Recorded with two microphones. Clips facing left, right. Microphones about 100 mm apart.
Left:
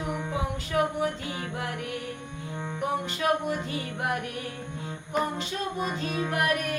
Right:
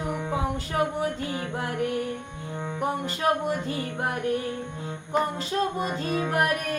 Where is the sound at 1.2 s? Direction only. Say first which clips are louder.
Right 3 dB; 40° right (ahead or behind).